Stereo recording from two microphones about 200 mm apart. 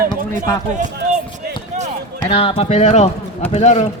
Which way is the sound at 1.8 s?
35° right (ahead or behind).